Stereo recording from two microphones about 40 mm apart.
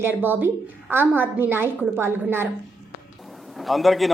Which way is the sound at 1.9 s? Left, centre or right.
Right.